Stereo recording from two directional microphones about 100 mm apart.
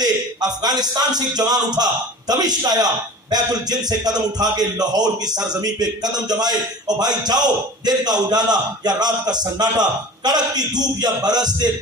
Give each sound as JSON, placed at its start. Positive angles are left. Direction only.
{"t": 0.0, "sound": "a man's voice", "side_deg": -40}